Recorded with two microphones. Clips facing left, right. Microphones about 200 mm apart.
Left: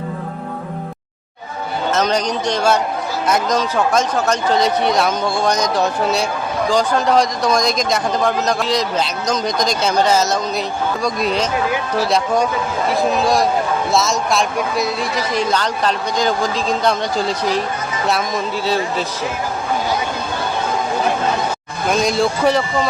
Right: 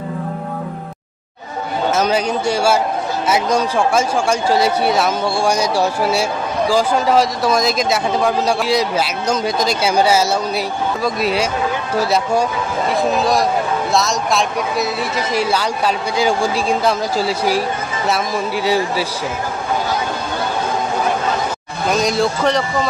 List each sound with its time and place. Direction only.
1.9 s a man's voice: 10° right (ahead or behind)
21.8 s a man's voice: centre (ahead or behind)